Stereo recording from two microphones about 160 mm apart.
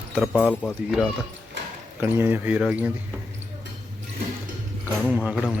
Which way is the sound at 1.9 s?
15° right (ahead or behind).